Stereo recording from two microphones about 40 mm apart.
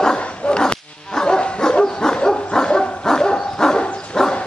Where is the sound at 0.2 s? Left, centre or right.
Left.